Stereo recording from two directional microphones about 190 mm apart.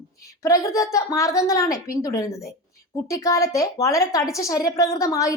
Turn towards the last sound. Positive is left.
turn(degrees=15)  # may be behind; listen again after turning